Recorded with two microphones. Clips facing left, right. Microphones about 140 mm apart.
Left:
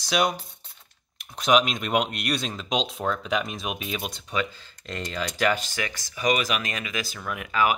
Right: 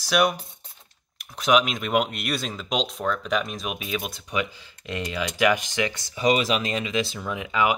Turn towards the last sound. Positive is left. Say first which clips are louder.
# right 1 dB
turn(degrees=-20)  # may be behind; listen again after turning